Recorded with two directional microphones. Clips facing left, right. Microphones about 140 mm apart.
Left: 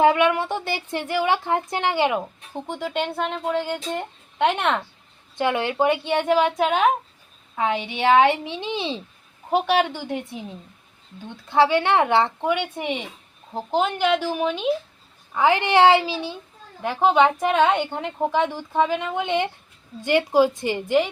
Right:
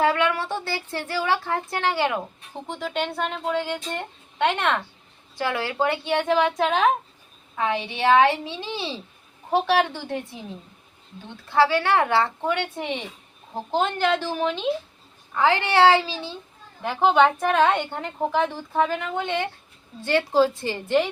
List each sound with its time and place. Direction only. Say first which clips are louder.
0.0 s speech: left 4 dB; 20° left (ahead or behind)
3.2 s speech: left 1 dB; centre (ahead or behind)
5.4 s a woman's voice: left 3 dB; 20° left (ahead or behind)
11.4 s a woman's voice: left 2 dB; 20° left (ahead or behind)
16.8 s speech: left 1 dB; centre (ahead or behind)
17.4 s a woman's voice: left 1 dB; 20° left (ahead or behind)